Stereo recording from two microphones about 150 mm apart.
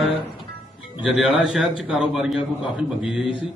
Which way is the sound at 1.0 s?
5° right (ahead or behind).